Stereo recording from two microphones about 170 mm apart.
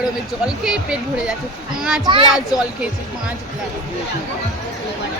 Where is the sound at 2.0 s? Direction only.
30° right (ahead or behind).